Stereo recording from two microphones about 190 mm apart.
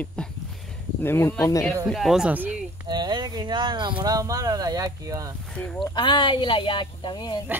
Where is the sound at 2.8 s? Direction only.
25° right (ahead or behind).